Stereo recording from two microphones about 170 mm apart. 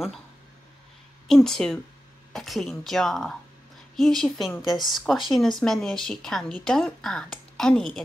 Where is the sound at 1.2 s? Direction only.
Centre (ahead or behind).